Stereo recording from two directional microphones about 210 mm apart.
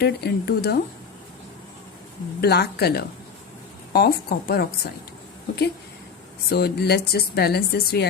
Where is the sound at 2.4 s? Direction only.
50° left (ahead or behind).